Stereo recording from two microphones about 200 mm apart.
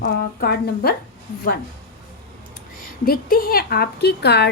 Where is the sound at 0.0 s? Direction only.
55° left (ahead or behind).